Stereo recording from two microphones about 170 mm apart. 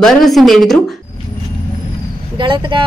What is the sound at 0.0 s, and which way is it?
Speech, centre (ahead or behind).